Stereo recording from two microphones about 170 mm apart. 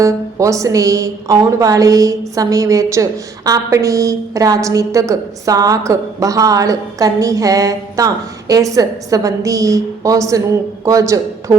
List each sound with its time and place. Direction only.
0.0 s a woman's voice: 20° right (ahead or behind)